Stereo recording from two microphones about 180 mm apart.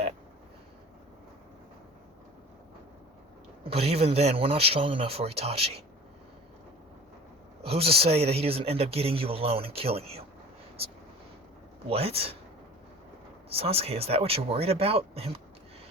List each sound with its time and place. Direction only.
3.6 s speech: 35° right (ahead or behind)
7.6 s speech: 35° right (ahead or behind)
11.9 s speech: 35° right (ahead or behind)
13.5 s speech: 35° right (ahead or behind)